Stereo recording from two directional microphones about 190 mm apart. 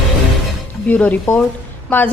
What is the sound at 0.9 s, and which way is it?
A woman's voice, 5° left (ahead or behind).